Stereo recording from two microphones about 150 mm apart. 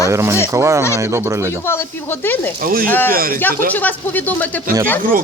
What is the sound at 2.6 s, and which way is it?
Speech, 70° right (ahead or behind).